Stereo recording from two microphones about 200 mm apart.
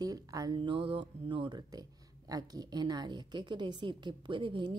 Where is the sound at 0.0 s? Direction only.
20° right (ahead or behind).